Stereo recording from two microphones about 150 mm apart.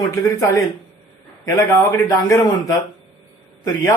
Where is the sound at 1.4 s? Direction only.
20° left (ahead or behind).